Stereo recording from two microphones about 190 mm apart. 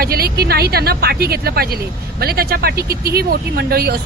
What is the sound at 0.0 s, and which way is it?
Speech, 55° right (ahead or behind).